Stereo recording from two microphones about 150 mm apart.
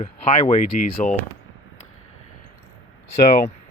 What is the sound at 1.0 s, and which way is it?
Speech, 60° left (ahead or behind).